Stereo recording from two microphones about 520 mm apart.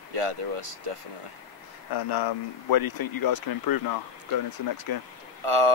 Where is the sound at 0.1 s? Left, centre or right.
Right.